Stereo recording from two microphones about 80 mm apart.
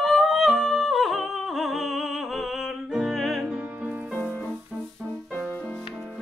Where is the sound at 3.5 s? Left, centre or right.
Centre.